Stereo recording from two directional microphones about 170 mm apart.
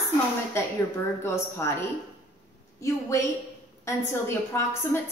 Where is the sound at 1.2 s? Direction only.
15° left (ahead or behind).